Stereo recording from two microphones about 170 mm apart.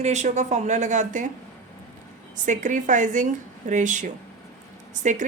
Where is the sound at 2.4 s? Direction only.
50° right (ahead or behind).